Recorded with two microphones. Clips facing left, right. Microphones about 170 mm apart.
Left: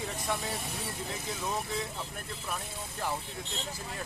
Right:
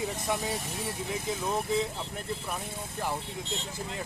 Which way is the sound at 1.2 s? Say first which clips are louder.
Right 5 dB; 20° right (ahead or behind).